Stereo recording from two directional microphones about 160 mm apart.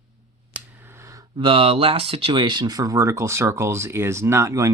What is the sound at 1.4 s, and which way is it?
Speech, 30° right (ahead or behind).